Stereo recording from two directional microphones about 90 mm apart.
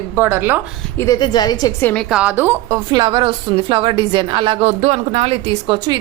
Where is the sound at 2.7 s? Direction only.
50° right (ahead or behind); by 4.6 s 70° right (ahead or behind).